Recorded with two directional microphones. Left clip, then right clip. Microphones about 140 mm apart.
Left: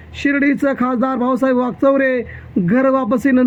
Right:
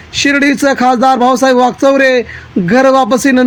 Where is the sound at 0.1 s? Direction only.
40° right (ahead or behind).